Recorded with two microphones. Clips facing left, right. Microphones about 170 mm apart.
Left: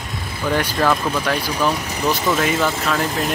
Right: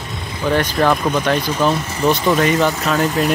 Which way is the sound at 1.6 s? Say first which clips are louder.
Right 3 dB; 25° right (ahead or behind).